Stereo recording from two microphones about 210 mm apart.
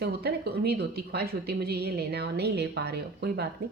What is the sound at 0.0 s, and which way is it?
Speech, 50° right (ahead or behind).